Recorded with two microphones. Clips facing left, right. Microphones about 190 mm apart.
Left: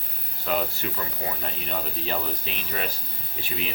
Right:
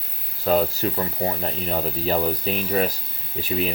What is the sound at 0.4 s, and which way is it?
Speech, 40° right (ahead or behind).